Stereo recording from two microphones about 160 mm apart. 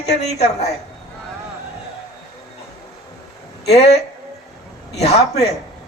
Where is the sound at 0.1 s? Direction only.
45° left (ahead or behind).